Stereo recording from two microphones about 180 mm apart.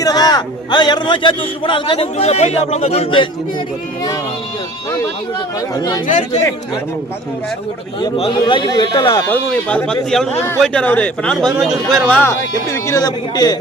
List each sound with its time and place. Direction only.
0.0 s a man's voice: 20° left (ahead or behind)
5.5 s a man's voice: 20° left (ahead or behind)
6.1 s speech: 40° left (ahead or behind)
8.0 s a man's voice: 30° left (ahead or behind)
9.2 s speech: 10° left (ahead or behind)